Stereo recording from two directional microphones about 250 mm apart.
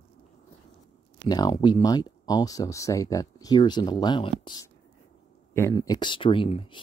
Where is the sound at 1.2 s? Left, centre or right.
Centre.